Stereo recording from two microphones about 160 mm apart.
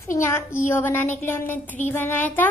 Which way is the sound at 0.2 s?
15° left (ahead or behind).